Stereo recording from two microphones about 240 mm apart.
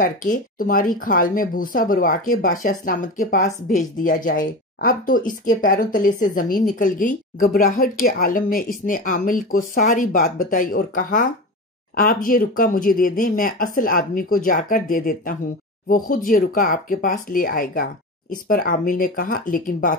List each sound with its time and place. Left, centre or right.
0.0 s speech: left